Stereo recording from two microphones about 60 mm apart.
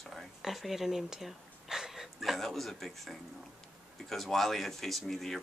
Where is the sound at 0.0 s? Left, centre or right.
Centre.